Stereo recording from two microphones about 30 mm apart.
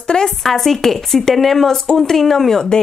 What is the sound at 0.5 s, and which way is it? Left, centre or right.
A woman's voice, centre.